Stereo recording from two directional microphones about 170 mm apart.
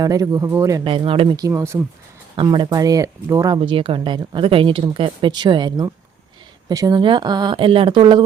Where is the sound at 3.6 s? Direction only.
30° right (ahead or behind).